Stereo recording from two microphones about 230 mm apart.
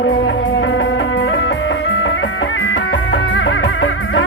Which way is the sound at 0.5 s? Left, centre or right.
Left.